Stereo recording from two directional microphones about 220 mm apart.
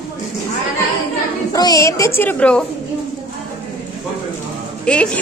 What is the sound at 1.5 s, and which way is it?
Speech, 15° left (ahead or behind).